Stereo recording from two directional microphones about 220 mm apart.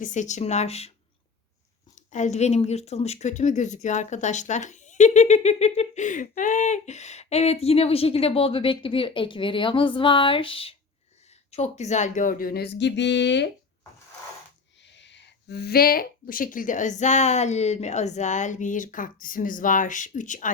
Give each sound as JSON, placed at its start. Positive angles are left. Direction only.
{"t": 0.0, "sound": "speech", "side_deg": 35}
{"t": 2.0, "sound": "speech", "side_deg": 35}
{"t": 14.8, "sound": "speech", "side_deg": 55}